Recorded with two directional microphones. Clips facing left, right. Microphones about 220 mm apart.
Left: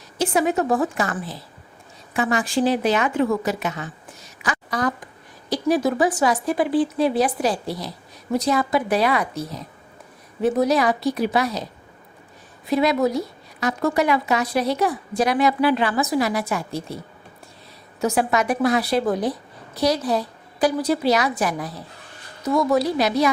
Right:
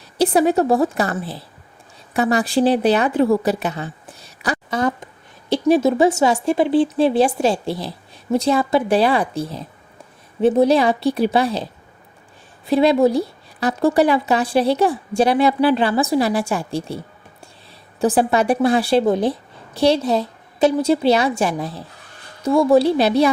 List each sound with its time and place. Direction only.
0.2 s a woman's voice: 35° right (ahead or behind)
18.0 s speech: 30° right (ahead or behind)